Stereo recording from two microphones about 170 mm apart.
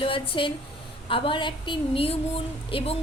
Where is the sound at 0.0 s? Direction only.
30° left (ahead or behind).